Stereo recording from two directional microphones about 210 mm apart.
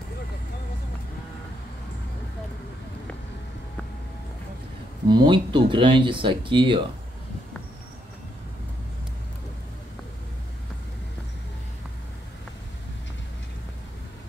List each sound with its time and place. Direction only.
5.0 s speech: 20° right (ahead or behind)